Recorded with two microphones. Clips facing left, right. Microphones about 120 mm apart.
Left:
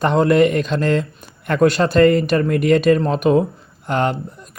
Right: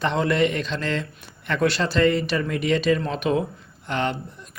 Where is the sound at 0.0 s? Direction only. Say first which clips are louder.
Left 7 dB; 45° left (ahead or behind).